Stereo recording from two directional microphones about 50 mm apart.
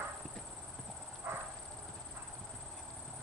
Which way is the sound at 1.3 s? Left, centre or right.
Right.